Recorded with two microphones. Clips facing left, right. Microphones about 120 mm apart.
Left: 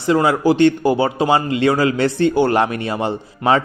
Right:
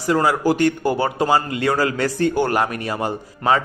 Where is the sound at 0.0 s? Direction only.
20° left (ahead or behind).